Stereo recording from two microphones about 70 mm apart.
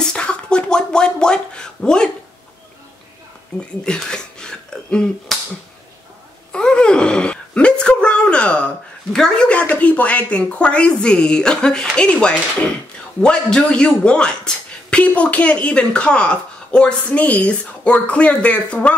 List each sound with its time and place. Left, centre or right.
0.0 s a sound: centre
3.8 s speech: centre
6.5 s speech: centre